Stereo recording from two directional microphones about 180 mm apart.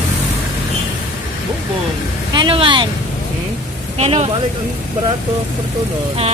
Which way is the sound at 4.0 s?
35° right (ahead or behind).